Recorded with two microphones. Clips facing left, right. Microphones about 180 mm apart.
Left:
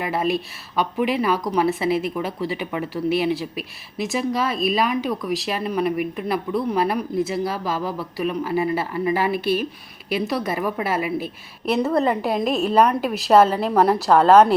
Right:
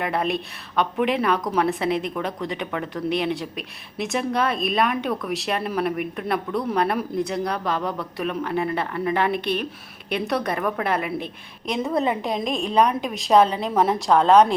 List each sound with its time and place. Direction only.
0.0 s speech: centre (ahead or behind)